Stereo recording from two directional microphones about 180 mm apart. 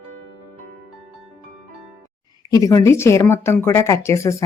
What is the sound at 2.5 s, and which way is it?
Speech, 20° left (ahead or behind).